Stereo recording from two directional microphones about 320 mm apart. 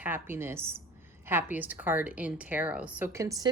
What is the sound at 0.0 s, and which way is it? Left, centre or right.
A woman's voice, centre.